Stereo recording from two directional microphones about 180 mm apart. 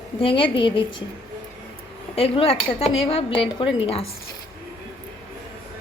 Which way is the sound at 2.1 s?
30° left (ahead or behind).